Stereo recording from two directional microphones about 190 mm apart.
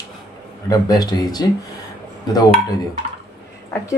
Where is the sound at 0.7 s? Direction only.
20° left (ahead or behind).